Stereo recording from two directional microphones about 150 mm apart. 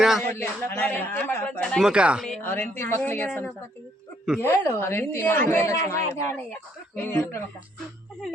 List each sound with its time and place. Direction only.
0.2 s speech: 15° left (ahead or behind); by 2.2 s 5° right (ahead or behind)
2.4 s speech: 15° left (ahead or behind)